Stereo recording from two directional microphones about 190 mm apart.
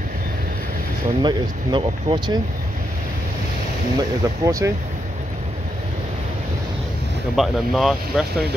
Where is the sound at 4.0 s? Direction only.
20° right (ahead or behind).